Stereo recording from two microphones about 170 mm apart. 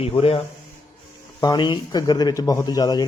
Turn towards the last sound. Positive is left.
turn(degrees=25)  # may be behind; listen again after turning